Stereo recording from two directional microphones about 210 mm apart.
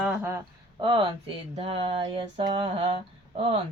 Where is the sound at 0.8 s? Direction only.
20° right (ahead or behind).